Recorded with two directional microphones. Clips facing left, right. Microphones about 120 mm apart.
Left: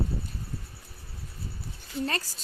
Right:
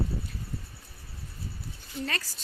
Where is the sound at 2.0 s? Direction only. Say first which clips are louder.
Left 3 dB; 35° left (ahead or behind).